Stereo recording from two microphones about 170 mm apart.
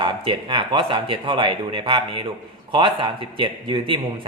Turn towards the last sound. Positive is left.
turn(degrees=-30)  # may be behind; listen again after turning